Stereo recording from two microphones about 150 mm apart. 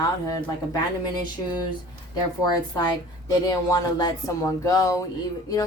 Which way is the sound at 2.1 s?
25° left (ahead or behind).